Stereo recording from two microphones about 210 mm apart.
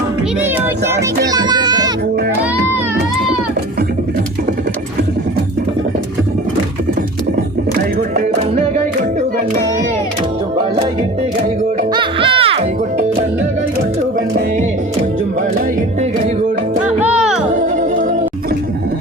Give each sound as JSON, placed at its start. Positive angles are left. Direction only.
{"t": 0.9, "sound": "music", "side_deg": -15}
{"t": 11.9, "sound": "music", "side_deg": -25}
{"t": 17.0, "sound": "music", "side_deg": -5}